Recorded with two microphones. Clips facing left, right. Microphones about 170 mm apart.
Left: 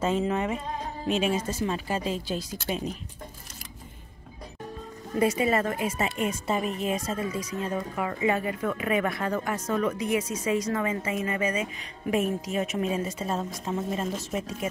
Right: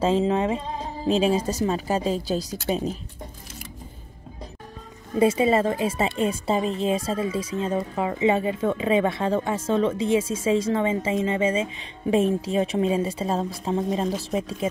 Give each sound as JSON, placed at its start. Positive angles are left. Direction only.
{"t": 0.0, "sound": "speech", "side_deg": -30}
{"t": 5.1, "sound": "a woman's voice", "side_deg": -25}
{"t": 14.0, "sound": "speech", "side_deg": 0}
{"t": 14.6, "sound": "a woman's voice", "side_deg": -30}